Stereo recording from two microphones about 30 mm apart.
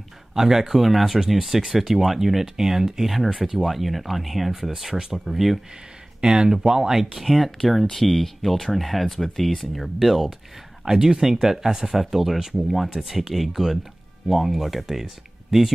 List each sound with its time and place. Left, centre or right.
0.3 s speech: centre
6.2 s speech: right
7.0 s speech: centre
7.2 s speech: centre
10.9 s speech: centre